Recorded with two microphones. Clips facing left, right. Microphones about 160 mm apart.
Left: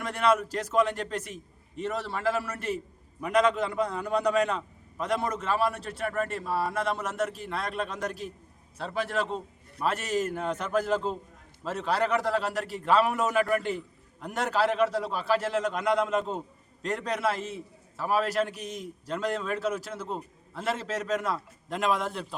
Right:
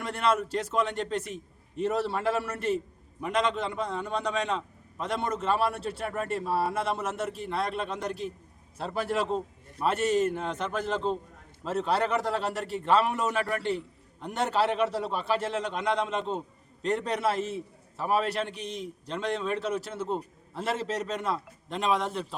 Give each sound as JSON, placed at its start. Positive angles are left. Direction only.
{"t": 0.0, "sound": "a man's voice", "side_deg": 0}
{"t": 5.9, "sound": "a man's voice", "side_deg": -30}
{"t": 6.3, "sound": "a man's voice", "side_deg": 0}